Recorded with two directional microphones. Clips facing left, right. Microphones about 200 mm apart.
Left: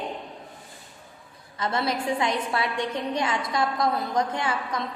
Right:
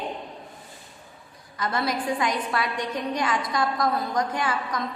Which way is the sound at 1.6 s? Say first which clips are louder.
Even; 25° left (ahead or behind).